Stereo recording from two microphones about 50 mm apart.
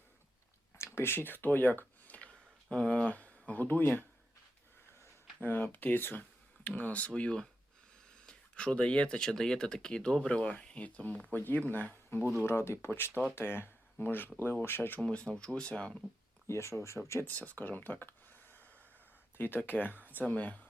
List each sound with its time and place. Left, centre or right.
0.9 s a sound: left; by 3.1 s centre
3.1 s speech: left
5.4 s speech: left
6.7 s speech: left
7.1 s speech: left
12.4 s speech: left
12.9 s speech: left
15.1 s speech: centre
16.5 s speech: left
17.2 s speech: left